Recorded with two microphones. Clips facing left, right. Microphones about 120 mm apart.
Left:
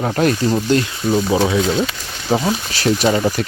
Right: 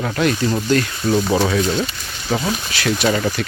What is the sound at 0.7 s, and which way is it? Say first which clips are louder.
Speech: left 1 dB; 25° left (ahead or behind).